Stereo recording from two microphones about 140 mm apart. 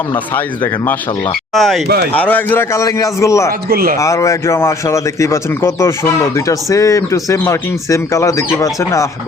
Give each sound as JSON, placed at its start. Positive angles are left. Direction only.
{"t": 0.3, "sound": "speech", "side_deg": 15}
{"t": 1.5, "sound": "speech", "side_deg": 0}
{"t": 2.1, "sound": "speech", "side_deg": 10}
{"t": 3.7, "sound": "speech", "side_deg": -90}
{"t": 3.9, "sound": "speech", "side_deg": 20}